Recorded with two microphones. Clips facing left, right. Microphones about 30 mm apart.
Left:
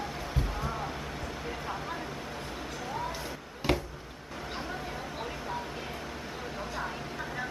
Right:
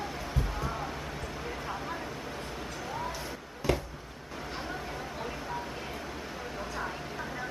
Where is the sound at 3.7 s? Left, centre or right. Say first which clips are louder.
Left 1 dB; left.